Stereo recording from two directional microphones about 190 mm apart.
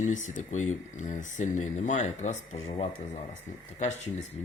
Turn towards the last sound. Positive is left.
turn(degrees=35)  # may be behind; listen again after turning